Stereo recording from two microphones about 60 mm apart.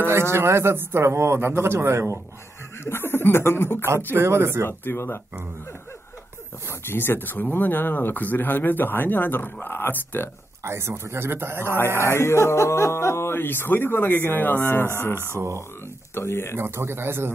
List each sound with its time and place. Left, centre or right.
0.0 s a man's voice: right
2.8 s speech: left
3.8 s a man's voice: right
4.6 s speech: left
6.7 s speech: left
10.6 s a man's voice: right
12.1 s speech: left
15.3 s a man's voice: right
16.2 s speech: left
16.5 s a man's voice: right